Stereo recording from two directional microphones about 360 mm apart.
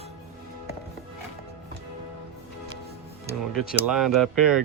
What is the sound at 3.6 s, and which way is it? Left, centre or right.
Speech, left.